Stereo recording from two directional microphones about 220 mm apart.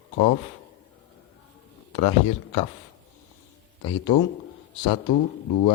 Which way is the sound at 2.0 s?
25° left (ahead or behind).